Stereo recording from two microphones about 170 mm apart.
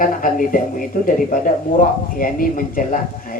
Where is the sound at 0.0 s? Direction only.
55° left (ahead or behind).